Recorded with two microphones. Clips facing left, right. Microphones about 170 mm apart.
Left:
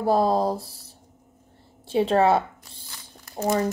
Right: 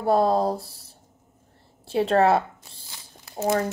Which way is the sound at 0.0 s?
Centre (ahead or behind).